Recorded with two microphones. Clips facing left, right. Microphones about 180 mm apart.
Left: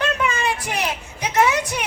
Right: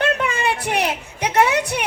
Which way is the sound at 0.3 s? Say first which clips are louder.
Right 2 dB; 60° right (ahead or behind).